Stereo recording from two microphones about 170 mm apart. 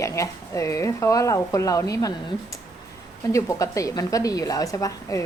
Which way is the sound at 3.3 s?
20° left (ahead or behind).